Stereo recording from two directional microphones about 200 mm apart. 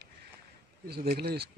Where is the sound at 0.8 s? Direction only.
50° right (ahead or behind).